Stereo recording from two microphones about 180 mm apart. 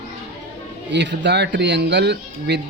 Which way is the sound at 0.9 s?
75° right (ahead or behind).